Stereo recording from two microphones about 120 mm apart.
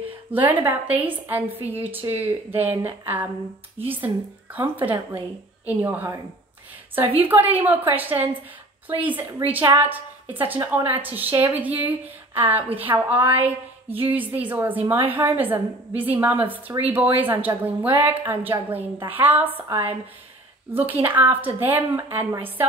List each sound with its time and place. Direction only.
0.3 s a woman's voice: 15° right (ahead or behind)
7.2 s a woman's voice: 15° right (ahead or behind)